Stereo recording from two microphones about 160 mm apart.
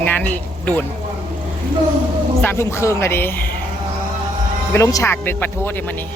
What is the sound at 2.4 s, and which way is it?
Speech, 15° left (ahead or behind).